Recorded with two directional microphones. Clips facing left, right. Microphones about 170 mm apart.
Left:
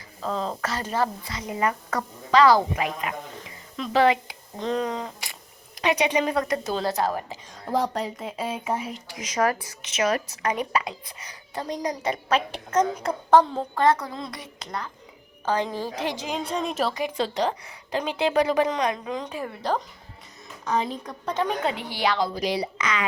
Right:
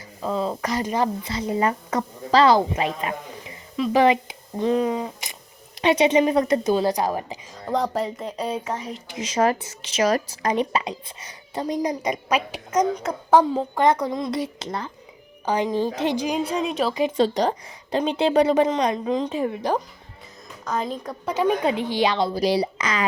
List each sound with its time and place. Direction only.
0.2 s a woman's voice: 5° right (ahead or behind)
1.3 s a woman's voice: 30° right (ahead or behind)
3.9 s speech: 20° right (ahead or behind)
5.8 s a woman's voice: 25° right (ahead or behind)
7.5 s speech: centre (ahead or behind)
9.0 s a woman's voice: 25° right (ahead or behind)
14.3 s speech: 30° right (ahead or behind)
15.4 s a woman's voice: 15° right (ahead or behind)
16.5 s speech: 5° right (ahead or behind)
17.2 s speech: 40° right (ahead or behind); by 19.8 s 15° right (ahead or behind)
20.7 s a woman's voice: centre (ahead or behind); by 22.3 s 20° right (ahead or behind)
22.4 s speech: 35° right (ahead or behind)